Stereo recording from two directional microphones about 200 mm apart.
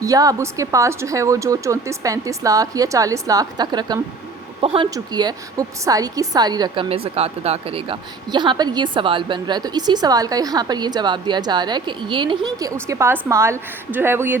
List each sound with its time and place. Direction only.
0.0 s a woman's voice: 15° right (ahead or behind)